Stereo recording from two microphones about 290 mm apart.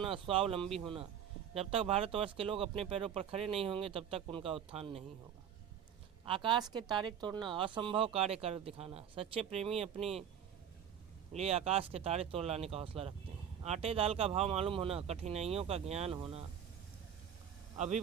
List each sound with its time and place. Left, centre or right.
0.0 s a woman's voice: centre
6.2 s a woman's voice: centre
11.3 s speech: right
17.7 s speech: right